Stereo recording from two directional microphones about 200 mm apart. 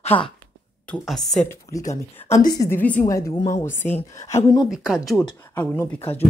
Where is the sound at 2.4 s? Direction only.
50° left (ahead or behind).